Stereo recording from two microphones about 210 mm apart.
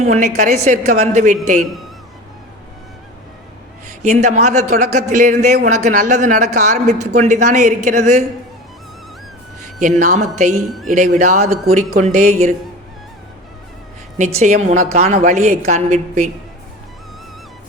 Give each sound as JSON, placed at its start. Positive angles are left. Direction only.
{"t": 0.0, "sound": "speech", "side_deg": -35}
{"t": 4.0, "sound": "speech", "side_deg": -35}
{"t": 10.0, "sound": "speech", "side_deg": -35}
{"t": 14.3, "sound": "speech", "side_deg": -30}